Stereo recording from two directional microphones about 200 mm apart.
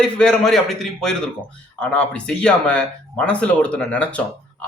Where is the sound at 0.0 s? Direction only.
5° left (ahead or behind).